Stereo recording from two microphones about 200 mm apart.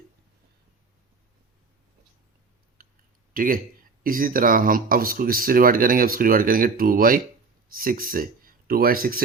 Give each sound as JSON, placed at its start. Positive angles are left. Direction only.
{"t": 2.8, "sound": "clicking", "side_deg": -45}
{"t": 3.3, "sound": "speech", "side_deg": -45}